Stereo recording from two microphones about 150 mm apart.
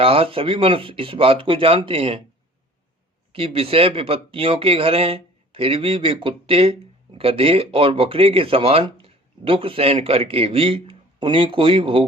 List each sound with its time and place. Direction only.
0.0 s speech: 40° right (ahead or behind)
3.3 s speech: 40° right (ahead or behind)